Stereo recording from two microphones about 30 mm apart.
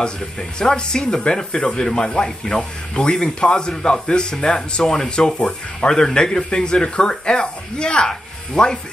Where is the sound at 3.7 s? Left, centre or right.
Left.